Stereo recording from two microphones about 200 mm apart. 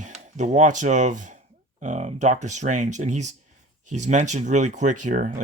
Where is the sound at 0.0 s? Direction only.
35° right (ahead or behind).